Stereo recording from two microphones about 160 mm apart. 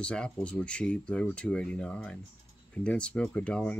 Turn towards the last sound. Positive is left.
turn(degrees=5)  # may be behind; listen again after turning